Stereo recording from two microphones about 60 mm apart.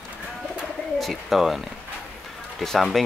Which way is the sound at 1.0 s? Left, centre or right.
Centre.